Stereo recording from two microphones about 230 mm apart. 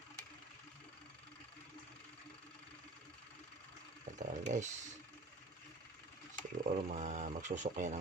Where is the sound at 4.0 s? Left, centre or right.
Right.